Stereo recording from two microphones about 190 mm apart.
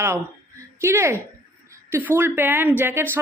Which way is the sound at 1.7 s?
15° right (ahead or behind).